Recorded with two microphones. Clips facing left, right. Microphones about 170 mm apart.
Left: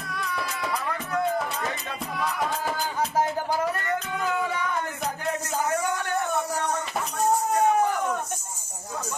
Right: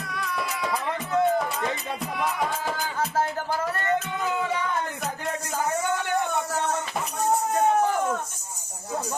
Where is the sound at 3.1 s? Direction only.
15° left (ahead or behind).